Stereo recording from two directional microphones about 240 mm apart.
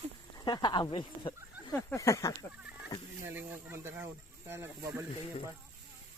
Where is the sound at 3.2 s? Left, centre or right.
Centre.